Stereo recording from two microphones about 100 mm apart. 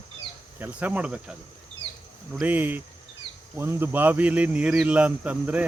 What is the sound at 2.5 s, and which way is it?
Speech, 20° right (ahead or behind).